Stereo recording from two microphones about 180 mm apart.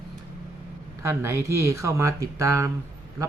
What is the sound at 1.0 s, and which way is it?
Speech, 15° right (ahead or behind).